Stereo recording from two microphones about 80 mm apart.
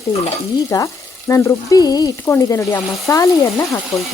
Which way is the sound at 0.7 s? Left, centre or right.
Left.